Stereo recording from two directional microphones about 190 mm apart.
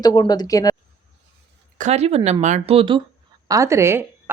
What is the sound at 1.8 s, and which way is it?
Speech, 35° right (ahead or behind).